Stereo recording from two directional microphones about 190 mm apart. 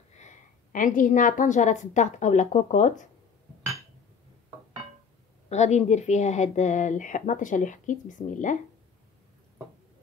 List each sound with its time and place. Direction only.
0.1 s a woman's voice: 40° left (ahead or behind)
5.5 s speech: 35° left (ahead or behind)